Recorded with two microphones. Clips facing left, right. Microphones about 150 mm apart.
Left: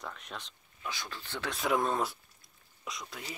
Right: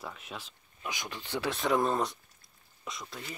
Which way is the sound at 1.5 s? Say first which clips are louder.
Right 2 dB; centre (ahead or behind).